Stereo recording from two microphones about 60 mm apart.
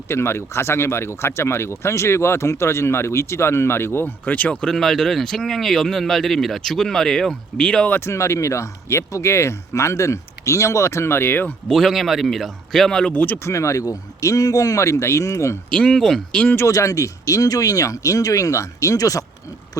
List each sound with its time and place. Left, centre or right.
0.1 s speech: left
4.7 s speech: centre
8.0 s speech: left
11.7 s speech: centre
13.1 s speech: left
13.4 s speech: left
15.7 s speech: centre
16.6 s speech: left
19.8 s a sound: left